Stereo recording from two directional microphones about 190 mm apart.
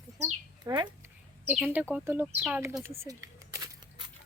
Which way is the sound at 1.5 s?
5° right (ahead or behind).